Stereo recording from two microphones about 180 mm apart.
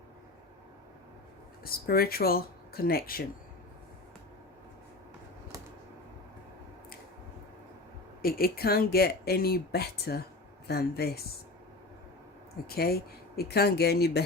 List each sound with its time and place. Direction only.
1.6 s speech: 55° left (ahead or behind)
8.2 s speech: 55° left (ahead or behind)
12.6 s speech: 60° left (ahead or behind)